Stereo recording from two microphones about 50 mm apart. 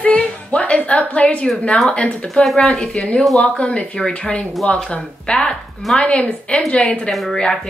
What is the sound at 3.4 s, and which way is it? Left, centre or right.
Speech, left.